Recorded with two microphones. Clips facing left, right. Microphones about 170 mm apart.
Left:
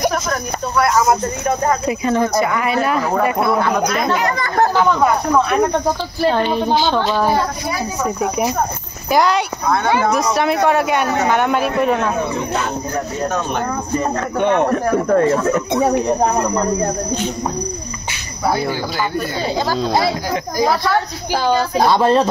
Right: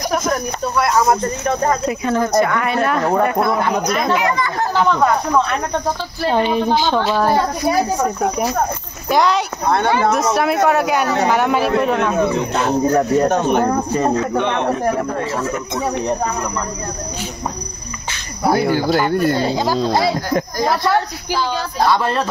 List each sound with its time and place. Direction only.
0.7 s speech: centre (ahead or behind)
4.1 s speech: 40° left (ahead or behind)
4.8 s speech: 5° left (ahead or behind)
6.3 s speech: 10° right (ahead or behind)
9.1 s speech: centre (ahead or behind)
13.3 s speech: 20° right (ahead or behind)
14.1 s speech: 50° left (ahead or behind)
18.5 s speech: 50° right (ahead or behind)
21.3 s speech: 50° left (ahead or behind)
21.7 s speech: 20° left (ahead or behind)